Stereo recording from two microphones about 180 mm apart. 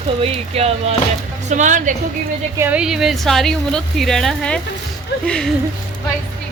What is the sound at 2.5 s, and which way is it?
A woman's voice, 10° right (ahead or behind).